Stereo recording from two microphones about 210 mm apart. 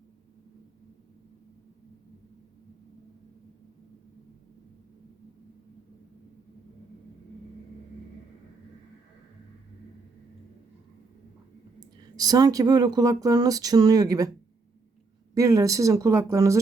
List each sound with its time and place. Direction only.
12.1 s speech: 20° right (ahead or behind)
15.4 s speech: 15° right (ahead or behind)